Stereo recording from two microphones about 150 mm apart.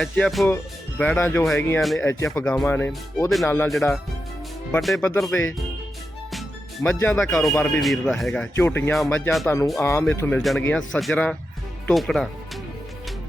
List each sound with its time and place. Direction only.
0.0 s speech: centre (ahead or behind)
0.4 s speech: 15° left (ahead or behind)
1.8 s speech: centre (ahead or behind)
2.0 s speech: 20° left (ahead or behind)
2.4 s speech: 5° left (ahead or behind)
3.7 s speech: centre (ahead or behind)
6.8 s speech: 15° left (ahead or behind)
7.2 s speech: centre (ahead or behind)
8.5 s speech: 15° left (ahead or behind)